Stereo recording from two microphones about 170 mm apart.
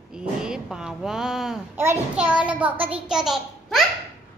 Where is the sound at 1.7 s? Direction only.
15° right (ahead or behind).